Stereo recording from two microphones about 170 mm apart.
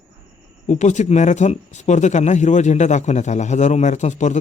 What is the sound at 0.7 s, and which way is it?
Speech, 45° left (ahead or behind).